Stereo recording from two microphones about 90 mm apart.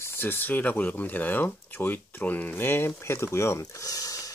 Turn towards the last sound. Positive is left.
turn(degrees=40)  # may be behind; listen again after turning